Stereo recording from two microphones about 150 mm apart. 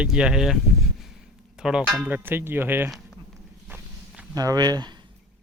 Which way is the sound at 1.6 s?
5° right (ahead or behind).